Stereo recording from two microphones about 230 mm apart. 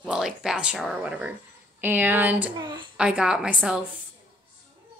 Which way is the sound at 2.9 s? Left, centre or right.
Centre.